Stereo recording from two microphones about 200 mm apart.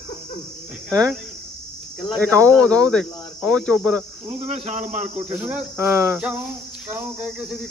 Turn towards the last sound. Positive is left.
turn(degrees=-5)  # may be behind; listen again after turning